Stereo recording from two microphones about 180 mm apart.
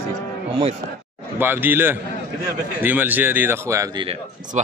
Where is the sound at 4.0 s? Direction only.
35° right (ahead or behind).